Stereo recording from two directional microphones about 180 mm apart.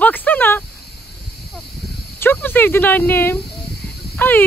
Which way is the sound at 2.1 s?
10° left (ahead or behind).